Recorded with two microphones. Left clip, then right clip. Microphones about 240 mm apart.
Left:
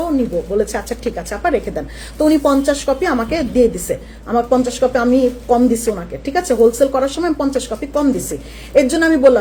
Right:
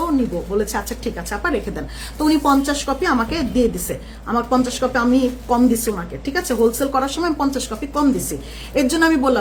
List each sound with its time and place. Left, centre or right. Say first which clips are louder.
0.6 s a woman's voice: left 4 dB; centre